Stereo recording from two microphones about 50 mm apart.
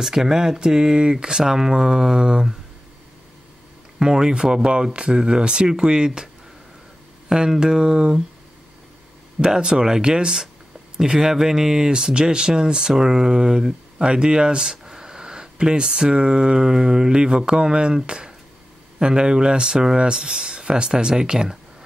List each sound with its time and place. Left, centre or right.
0.0 s speech: centre
4.0 s speech: centre
9.4 s speech: centre